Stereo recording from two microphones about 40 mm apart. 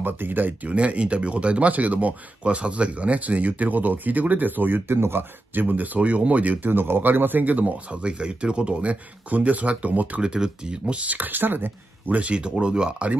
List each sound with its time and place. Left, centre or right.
0.0 s speech: right
0.7 s speech: right
5.6 s speech: right
5.9 s speech: right
7.6 s speech: right
9.3 s speech: right
10.2 s speech: right
11.0 s speech: right
12.1 s speech: right